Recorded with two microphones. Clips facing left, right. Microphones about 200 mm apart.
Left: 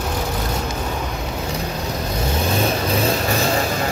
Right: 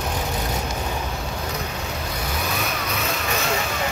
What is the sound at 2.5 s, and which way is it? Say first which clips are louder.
Vehicle: left 8 dB; 30° left (ahead or behind).